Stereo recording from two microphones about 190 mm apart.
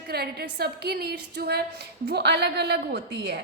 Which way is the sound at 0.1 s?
55° right (ahead or behind).